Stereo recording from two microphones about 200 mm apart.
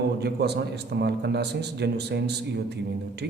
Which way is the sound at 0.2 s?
55° right (ahead or behind).